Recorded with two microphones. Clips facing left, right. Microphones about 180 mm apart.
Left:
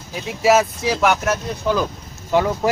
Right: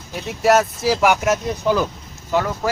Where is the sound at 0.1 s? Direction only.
Centre (ahead or behind); by 1.4 s 15° right (ahead or behind).